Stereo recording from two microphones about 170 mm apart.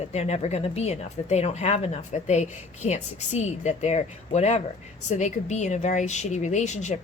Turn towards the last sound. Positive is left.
turn(degrees=45)  # may be behind; listen again after turning